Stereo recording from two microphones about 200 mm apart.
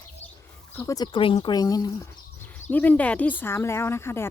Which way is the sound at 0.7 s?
15° left (ahead or behind).